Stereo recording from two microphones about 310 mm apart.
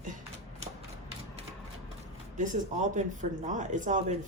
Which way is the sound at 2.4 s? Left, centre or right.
Right.